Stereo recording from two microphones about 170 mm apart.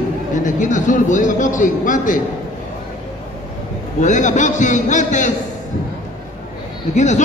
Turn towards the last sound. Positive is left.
turn(degrees=45)  # may be behind; listen again after turning